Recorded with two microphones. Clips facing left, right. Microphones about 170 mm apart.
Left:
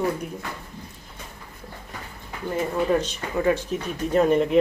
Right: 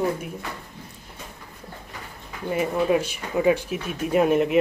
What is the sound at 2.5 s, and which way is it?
Speech, 10° right (ahead or behind).